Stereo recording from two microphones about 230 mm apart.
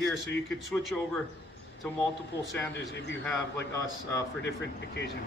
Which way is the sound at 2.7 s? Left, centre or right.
Left.